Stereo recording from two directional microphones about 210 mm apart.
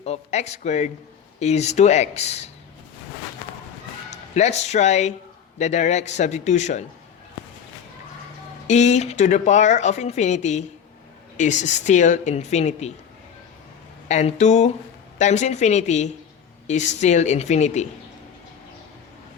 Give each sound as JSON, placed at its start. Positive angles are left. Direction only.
{"t": 0.0, "sound": "speech", "side_deg": 30}
{"t": 4.1, "sound": "speech", "side_deg": 35}
{"t": 8.6, "sound": "speech", "side_deg": 35}
{"t": 14.1, "sound": "speech", "side_deg": 35}